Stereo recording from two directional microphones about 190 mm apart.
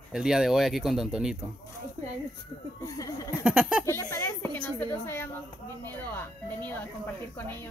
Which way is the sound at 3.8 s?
15° left (ahead or behind).